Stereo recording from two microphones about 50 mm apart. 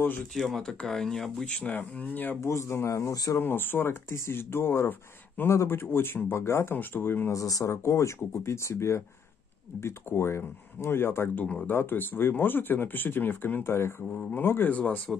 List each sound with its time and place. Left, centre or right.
0.6 s speech: centre
1.6 s speech: left
2.4 s speech: left
3.4 s speech: left
6.3 s speech: left
6.7 s speech: left
7.2 s speech: left
11.3 s speech: left
11.6 s speech: left
13.7 s speech: left
14.3 s speech: left
14.7 s speech: left